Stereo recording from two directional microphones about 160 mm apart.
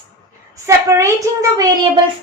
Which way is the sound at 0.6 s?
20° right (ahead or behind).